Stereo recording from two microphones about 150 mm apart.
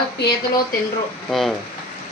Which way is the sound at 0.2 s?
90° left.